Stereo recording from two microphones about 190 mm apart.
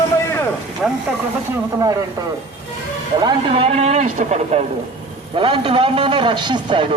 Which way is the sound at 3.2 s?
25° right (ahead or behind).